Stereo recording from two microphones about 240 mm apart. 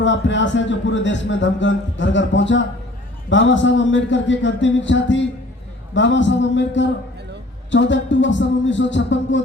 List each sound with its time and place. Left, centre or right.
0.0 s speech: left